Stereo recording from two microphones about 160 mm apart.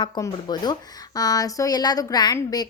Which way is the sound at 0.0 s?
25° left (ahead or behind).